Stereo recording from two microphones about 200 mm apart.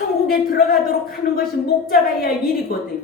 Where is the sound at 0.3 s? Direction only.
50° left (ahead or behind).